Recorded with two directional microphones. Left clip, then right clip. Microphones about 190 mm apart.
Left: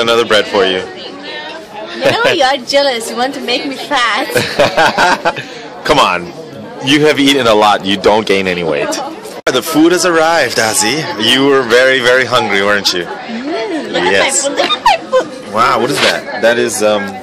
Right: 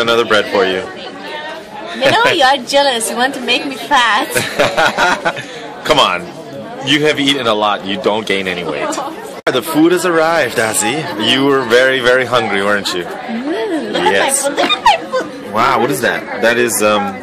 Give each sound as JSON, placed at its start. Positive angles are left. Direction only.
{"t": 0.0, "sound": "speech", "side_deg": 15}
{"t": 2.3, "sound": "a woman's voice", "side_deg": 5}
{"t": 4.4, "sound": "snicker", "side_deg": 30}
{"t": 6.9, "sound": "a man's voice", "side_deg": 30}
{"t": 9.4, "sound": "speech", "side_deg": 10}
{"t": 14.0, "sound": "speech", "side_deg": 10}
{"t": 15.5, "sound": "a woman's voice", "side_deg": 0}